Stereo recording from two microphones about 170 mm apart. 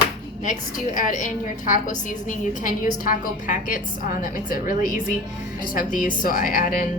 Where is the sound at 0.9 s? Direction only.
50° left (ahead or behind).